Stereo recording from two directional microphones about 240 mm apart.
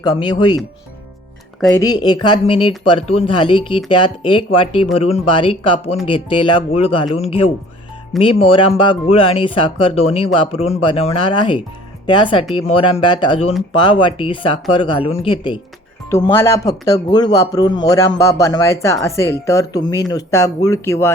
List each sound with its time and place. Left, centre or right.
0.0 s speech: centre
1.6 s speech: centre